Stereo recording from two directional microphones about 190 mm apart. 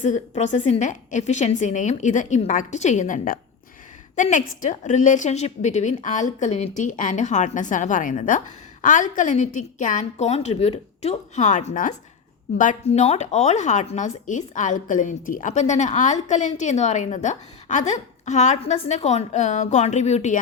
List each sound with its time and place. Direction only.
0.0 s a woman's voice: 40° left (ahead or behind)